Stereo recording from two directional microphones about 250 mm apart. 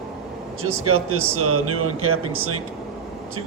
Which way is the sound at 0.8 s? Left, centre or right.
Right.